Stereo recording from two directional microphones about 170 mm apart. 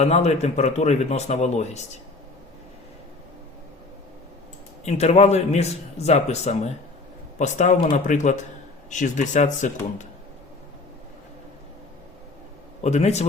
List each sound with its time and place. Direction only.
0.0 s a man's voice: 40° left (ahead or behind)
4.9 s a man's voice: 40° left (ahead or behind)
12.8 s a man's voice: 40° left (ahead or behind)